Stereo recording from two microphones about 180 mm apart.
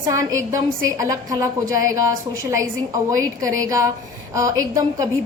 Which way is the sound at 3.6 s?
20° right (ahead or behind).